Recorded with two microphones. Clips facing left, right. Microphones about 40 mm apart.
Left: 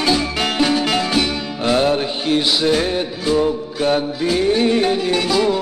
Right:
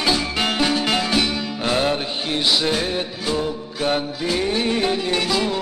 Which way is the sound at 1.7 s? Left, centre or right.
Centre.